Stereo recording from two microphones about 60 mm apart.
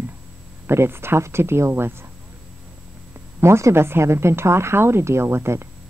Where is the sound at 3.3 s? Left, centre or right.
Right.